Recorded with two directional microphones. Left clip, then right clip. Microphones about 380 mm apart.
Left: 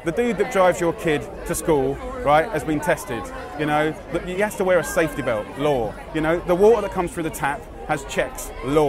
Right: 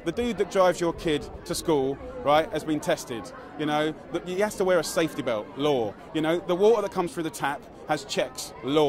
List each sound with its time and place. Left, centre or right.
0.0 s speech: left